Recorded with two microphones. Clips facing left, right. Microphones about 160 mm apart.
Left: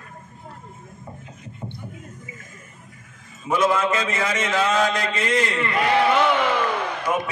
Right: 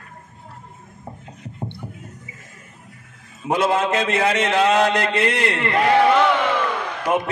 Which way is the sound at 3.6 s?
65° right (ahead or behind).